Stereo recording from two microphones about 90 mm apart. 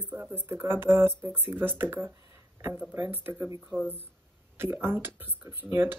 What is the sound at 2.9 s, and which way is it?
Speech, 20° right (ahead or behind).